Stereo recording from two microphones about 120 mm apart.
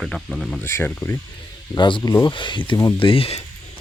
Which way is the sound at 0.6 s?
20° left (ahead or behind).